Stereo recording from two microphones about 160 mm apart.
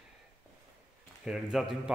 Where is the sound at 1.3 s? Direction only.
5° right (ahead or behind).